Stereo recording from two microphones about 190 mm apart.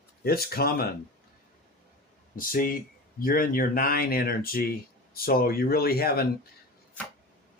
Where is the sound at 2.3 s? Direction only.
45° left (ahead or behind).